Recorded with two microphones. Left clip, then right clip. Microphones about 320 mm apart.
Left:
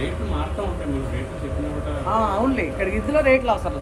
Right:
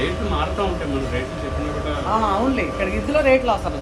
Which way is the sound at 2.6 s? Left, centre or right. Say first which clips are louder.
Right 1 dB; centre.